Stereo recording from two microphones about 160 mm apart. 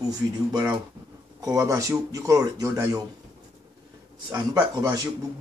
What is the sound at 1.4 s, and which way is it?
Speech, 20° right (ahead or behind).